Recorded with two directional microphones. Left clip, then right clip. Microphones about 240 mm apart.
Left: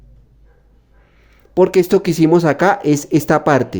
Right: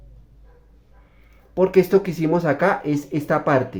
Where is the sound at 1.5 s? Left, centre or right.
Left.